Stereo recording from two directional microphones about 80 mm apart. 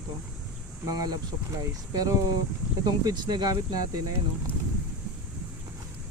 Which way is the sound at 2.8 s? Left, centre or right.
Right.